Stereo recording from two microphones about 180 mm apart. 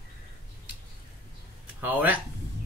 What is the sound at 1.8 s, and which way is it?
Speech, 10° right (ahead or behind).